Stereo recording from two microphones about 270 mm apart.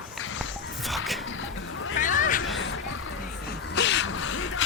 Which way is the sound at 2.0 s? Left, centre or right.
Left.